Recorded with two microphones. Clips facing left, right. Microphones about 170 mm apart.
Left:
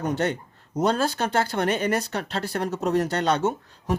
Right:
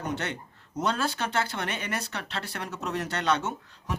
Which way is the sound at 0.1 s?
40° left (ahead or behind).